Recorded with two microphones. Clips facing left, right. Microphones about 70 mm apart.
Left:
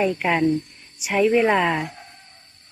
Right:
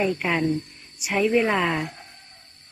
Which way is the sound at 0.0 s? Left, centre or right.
Centre.